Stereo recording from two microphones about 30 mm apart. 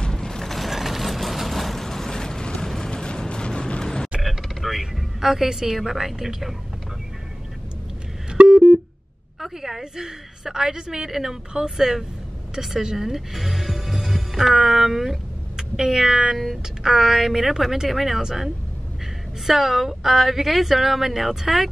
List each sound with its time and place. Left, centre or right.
0.1 s mechanisms: centre
0.5 s vehicle: centre; by 4.1 s left
4.2 s a sound: centre
5.9 s speech: centre
8.5 s a sound: centre
9.4 s a woman's voice: centre
19.4 s speech: centre